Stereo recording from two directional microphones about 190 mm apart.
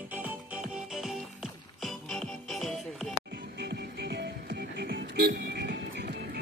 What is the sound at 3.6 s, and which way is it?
Music, 60° right (ahead or behind).